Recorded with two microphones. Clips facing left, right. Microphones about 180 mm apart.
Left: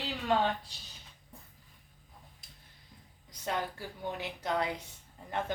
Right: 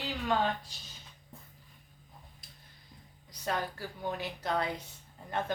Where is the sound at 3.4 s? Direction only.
20° left (ahead or behind).